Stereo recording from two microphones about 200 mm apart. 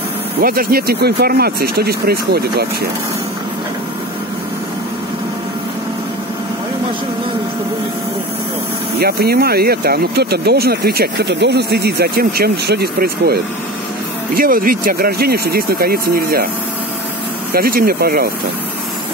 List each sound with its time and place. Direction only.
0.4 s speech: 45° right (ahead or behind)
9.0 s speech: 50° right (ahead or behind)
17.5 s speech: 45° right (ahead or behind)